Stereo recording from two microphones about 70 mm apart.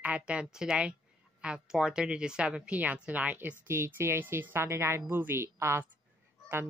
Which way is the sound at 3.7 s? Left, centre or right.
Right.